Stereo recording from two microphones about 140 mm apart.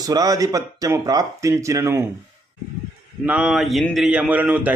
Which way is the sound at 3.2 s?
10° right (ahead or behind).